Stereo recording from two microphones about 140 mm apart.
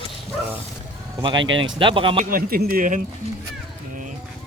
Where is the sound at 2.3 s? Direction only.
90° right; by 3.0 s 70° right (ahead or behind).